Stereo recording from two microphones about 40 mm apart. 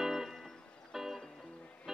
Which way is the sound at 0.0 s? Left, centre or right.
Centre.